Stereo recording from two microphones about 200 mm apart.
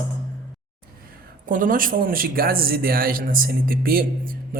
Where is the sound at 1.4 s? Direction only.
40° right (ahead or behind).